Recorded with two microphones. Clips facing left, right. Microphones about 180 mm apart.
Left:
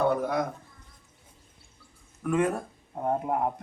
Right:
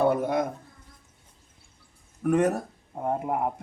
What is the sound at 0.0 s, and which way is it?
Speech, 25° right (ahead or behind).